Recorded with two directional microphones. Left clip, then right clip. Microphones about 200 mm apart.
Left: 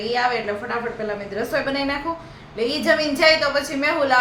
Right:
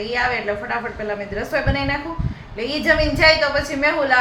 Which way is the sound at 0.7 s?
10° left (ahead or behind).